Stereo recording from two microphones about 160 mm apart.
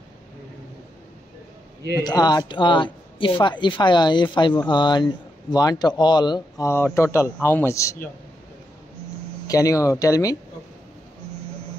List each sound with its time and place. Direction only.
2.0 s speech: 25° left (ahead or behind)
9.5 s speech: 20° left (ahead or behind)